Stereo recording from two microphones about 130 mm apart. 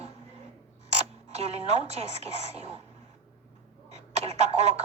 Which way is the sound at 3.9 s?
60° right (ahead or behind).